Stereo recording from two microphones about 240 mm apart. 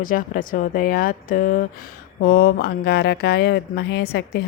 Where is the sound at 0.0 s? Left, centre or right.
Left.